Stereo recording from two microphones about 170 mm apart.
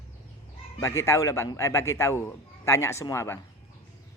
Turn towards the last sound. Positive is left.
turn(degrees=15)  # may be behind; listen again after turning